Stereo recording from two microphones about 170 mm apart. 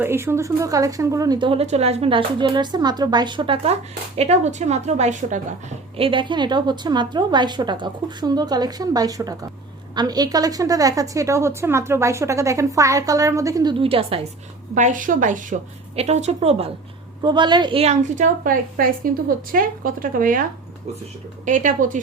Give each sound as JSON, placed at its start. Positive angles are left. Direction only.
{"t": 0.0, "sound": "a woman's voice", "side_deg": -15}
{"t": 6.0, "sound": "a woman's voice", "side_deg": -30}
{"t": 14.8, "sound": "a woman's voice", "side_deg": -50}
{"t": 18.4, "sound": "a woman's voice", "side_deg": -55}
{"t": 21.4, "sound": "a woman's voice", "side_deg": -50}